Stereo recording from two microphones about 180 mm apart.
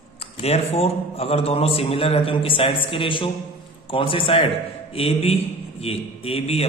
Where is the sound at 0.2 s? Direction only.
35° left (ahead or behind).